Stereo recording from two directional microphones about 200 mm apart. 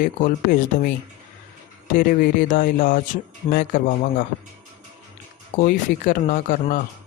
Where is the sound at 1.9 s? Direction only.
45° left (ahead or behind).